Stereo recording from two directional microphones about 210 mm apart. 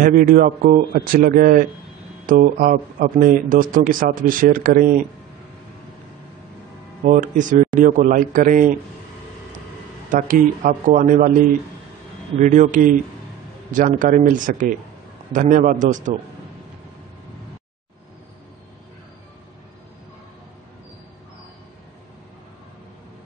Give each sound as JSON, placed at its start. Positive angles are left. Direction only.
{"t": 0.0, "sound": "speech", "side_deg": -40}
{"t": 7.1, "sound": "speech", "side_deg": -40}
{"t": 10.1, "sound": "speech", "side_deg": -40}
{"t": 12.4, "sound": "speech", "side_deg": -35}